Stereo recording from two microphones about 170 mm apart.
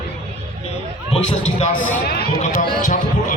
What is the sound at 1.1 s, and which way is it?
A man's voice, 40° left (ahead or behind).